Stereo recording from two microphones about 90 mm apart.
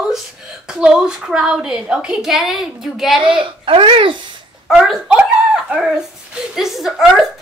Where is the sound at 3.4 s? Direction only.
75° right (ahead or behind).